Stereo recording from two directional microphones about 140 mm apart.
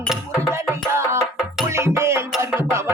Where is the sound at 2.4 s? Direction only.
20° right (ahead or behind).